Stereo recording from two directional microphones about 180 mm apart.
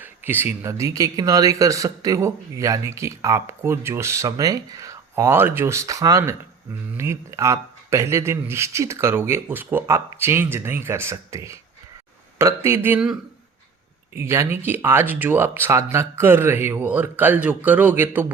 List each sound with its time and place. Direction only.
0.0 s speech: 10° right (ahead or behind)